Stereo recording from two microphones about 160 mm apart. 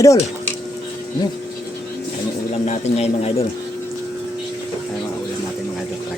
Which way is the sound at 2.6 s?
40° left (ahead or behind).